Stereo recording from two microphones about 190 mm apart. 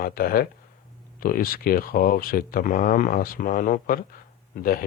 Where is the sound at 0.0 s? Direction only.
50° left (ahead or behind).